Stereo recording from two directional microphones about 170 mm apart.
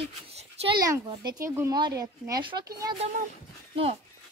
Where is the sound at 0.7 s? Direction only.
20° right (ahead or behind).